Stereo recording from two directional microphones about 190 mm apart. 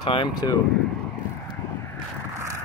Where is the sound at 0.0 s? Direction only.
25° left (ahead or behind).